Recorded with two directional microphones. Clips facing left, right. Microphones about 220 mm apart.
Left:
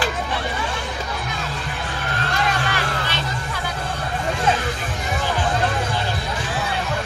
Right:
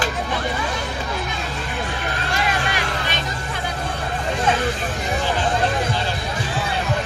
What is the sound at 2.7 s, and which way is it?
Music, 15° right (ahead or behind).